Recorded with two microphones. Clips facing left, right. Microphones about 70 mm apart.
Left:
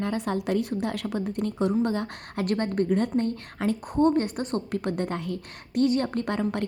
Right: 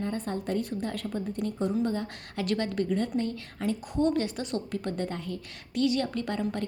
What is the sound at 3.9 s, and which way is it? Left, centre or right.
Speech, left.